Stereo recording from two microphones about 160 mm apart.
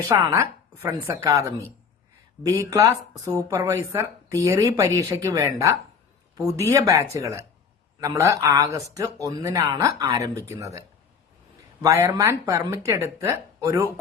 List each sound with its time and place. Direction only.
0.1 s a woman's voice: 15° right (ahead or behind)